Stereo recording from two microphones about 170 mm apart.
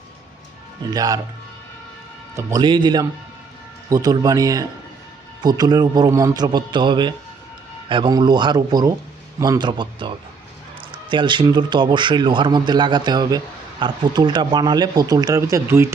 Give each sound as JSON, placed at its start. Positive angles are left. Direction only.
{"t": 0.9, "sound": "speech", "side_deg": -20}
{"t": 2.3, "sound": "speech", "side_deg": -25}